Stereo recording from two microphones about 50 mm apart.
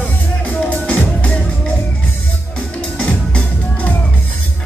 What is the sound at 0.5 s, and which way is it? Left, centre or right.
Music, left.